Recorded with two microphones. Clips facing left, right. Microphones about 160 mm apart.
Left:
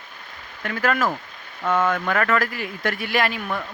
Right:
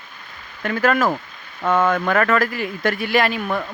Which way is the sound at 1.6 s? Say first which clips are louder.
Right 3 dB; 75° right (ahead or behind).